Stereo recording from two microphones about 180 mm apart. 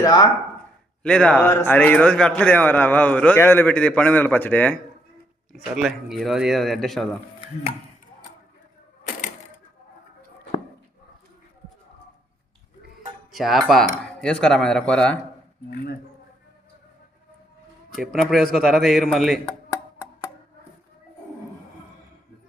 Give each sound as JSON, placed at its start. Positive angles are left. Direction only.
{"t": 0.0, "sound": "speech", "side_deg": 20}
{"t": 1.0, "sound": "a man's voice", "side_deg": 5}
{"t": 5.7, "sound": "speech", "side_deg": 0}
{"t": 13.3, "sound": "speech", "side_deg": 0}
{"t": 17.9, "sound": "speech", "side_deg": 0}